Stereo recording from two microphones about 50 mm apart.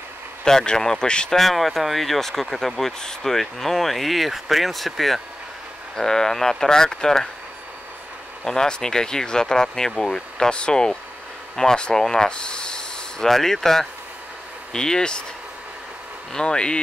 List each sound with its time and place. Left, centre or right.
0.4 s speech: centre
1.4 s speech: centre
8.5 s speech: centre
16.3 s speech: centre